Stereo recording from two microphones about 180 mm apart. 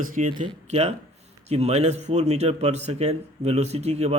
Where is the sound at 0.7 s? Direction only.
35° right (ahead or behind).